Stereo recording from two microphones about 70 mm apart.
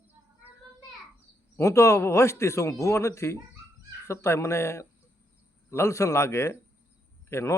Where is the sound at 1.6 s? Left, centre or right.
Left.